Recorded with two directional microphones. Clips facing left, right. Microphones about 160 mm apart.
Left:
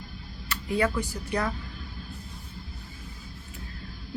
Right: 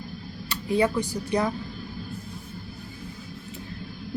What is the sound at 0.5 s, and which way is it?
Speech, 20° right (ahead or behind).